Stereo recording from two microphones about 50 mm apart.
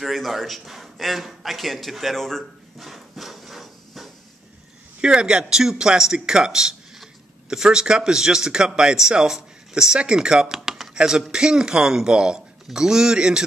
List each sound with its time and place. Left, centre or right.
0.0 s a man's voice: centre
5.0 s speech: centre